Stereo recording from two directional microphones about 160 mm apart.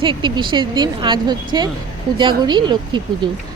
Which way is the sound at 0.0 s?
30° right (ahead or behind).